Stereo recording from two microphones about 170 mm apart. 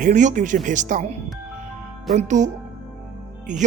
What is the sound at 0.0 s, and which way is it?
Speech, 45° right (ahead or behind).